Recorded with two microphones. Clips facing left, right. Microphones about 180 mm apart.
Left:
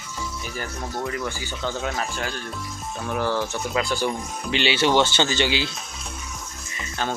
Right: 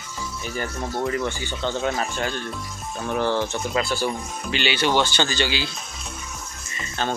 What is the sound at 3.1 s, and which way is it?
Speech, 25° right (ahead or behind).